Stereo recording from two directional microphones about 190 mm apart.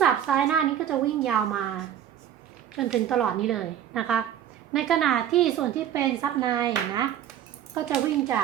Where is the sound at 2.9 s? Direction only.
Centre (ahead or behind).